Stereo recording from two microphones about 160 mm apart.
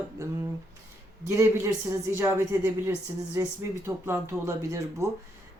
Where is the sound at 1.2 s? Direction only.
20° right (ahead or behind).